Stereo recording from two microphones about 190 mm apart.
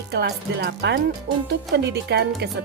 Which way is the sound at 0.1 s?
60° right (ahead or behind).